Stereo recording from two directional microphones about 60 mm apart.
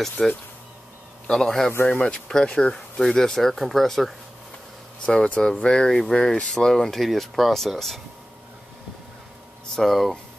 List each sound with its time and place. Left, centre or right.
0.2 s speech: centre
1.9 s speech: centre
5.0 s speech: centre
9.8 s speech: centre